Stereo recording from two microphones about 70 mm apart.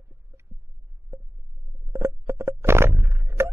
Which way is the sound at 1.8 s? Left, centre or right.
Right.